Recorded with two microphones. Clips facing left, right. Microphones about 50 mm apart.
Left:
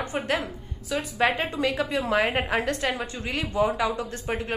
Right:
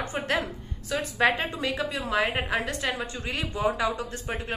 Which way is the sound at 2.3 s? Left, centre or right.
Centre.